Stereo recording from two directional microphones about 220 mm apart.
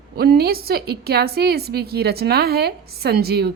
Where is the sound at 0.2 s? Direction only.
45° right (ahead or behind).